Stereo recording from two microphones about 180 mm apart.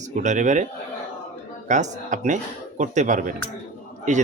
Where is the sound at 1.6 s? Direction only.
45° right (ahead or behind).